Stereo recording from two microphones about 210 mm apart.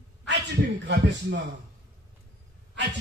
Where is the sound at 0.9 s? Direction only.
55° right (ahead or behind).